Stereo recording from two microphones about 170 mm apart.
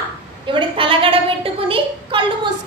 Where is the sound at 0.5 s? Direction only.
30° right (ahead or behind).